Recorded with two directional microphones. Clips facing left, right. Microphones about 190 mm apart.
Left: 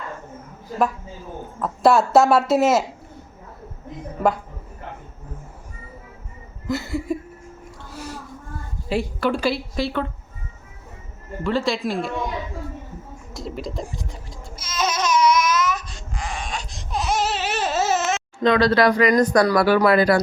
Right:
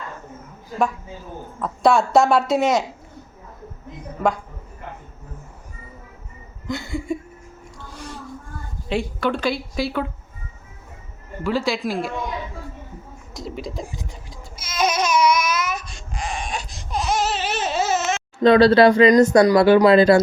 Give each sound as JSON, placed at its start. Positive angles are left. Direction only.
{"t": 1.6, "sound": "speech", "side_deg": 5}
{"t": 6.7, "sound": "speech", "side_deg": 5}
{"t": 7.9, "sound": "music", "side_deg": 5}
{"t": 8.9, "sound": "speech", "side_deg": 5}
{"t": 11.4, "sound": "speech", "side_deg": 0}
{"t": 13.3, "sound": "crying", "side_deg": 0}
{"t": 18.4, "sound": "speech", "side_deg": -30}